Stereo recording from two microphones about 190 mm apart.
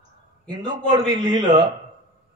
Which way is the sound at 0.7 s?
20° right (ahead or behind).